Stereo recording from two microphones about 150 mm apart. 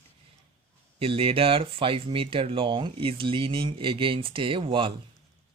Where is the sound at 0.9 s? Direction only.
40° right (ahead or behind).